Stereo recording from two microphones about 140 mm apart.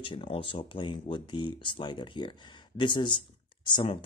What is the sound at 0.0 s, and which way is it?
Speech, 40° left (ahead or behind).